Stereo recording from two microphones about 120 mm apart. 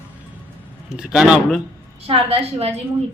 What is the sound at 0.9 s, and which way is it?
Speech, 5° right (ahead or behind).